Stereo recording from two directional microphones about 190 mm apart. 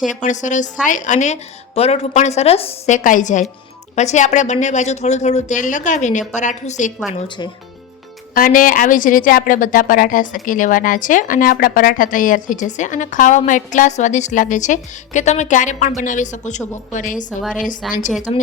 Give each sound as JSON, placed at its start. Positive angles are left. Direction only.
{"t": 0.1, "sound": "speech", "side_deg": 40}
{"t": 8.4, "sound": "a woman's voice", "side_deg": 45}
{"t": 17.8, "sound": "a woman's voice", "side_deg": 0}